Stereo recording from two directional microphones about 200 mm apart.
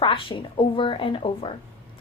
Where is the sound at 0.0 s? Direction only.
25° left (ahead or behind).